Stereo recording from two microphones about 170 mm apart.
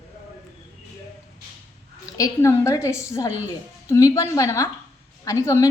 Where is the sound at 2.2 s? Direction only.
20° left (ahead or behind).